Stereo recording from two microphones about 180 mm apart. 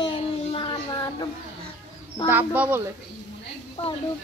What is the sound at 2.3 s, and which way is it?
Speech, 10° right (ahead or behind).